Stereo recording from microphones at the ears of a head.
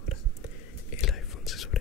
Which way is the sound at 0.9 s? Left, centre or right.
Left.